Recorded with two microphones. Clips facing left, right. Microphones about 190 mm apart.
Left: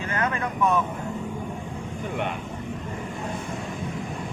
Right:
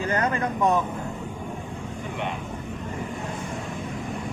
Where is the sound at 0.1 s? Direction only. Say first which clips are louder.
Right 1 dB; 35° right (ahead or behind).